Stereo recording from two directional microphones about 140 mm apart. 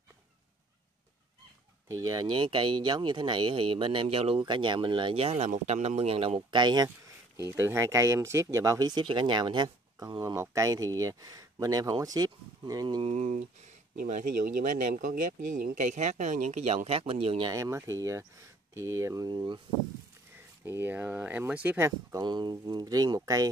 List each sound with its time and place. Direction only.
1.9 s speech: 25° right (ahead or behind)
7.3 s speech: 20° right (ahead or behind)
13.0 s speech: 55° right (ahead or behind)
17.5 s speech: 20° right (ahead or behind)
20.6 s speech: 15° right (ahead or behind)
22.2 s speech: 30° right (ahead or behind)